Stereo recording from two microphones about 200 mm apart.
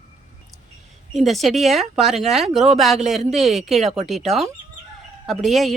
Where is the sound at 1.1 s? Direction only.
Centre (ahead or behind).